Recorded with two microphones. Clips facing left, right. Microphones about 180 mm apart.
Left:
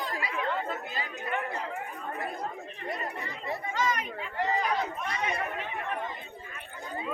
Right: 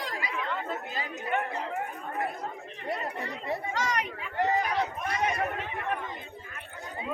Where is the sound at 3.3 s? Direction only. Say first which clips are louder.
Right 2 dB; 85° right.